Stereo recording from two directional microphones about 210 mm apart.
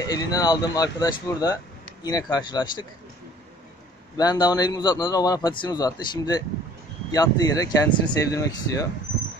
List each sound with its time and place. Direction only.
0.1 s a man's voice: 20° left (ahead or behind)
4.2 s a man's voice: 20° left (ahead or behind)